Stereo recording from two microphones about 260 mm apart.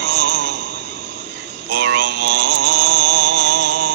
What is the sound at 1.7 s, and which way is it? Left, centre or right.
Mantra, right.